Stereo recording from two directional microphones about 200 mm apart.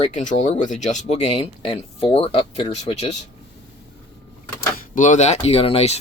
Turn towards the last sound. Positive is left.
turn(degrees=30)  # may be behind; listen again after turning